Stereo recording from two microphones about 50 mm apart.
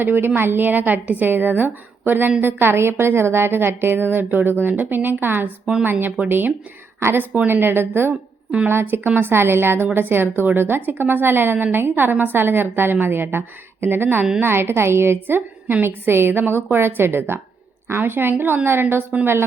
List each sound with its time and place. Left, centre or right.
0.0 s a woman's voice: right
15.8 s a woman's voice: right